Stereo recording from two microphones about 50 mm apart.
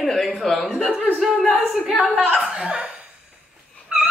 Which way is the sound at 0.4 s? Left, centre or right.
Centre.